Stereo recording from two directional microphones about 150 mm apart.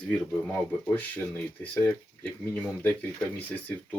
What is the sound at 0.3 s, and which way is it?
Speech, 5° left (ahead or behind).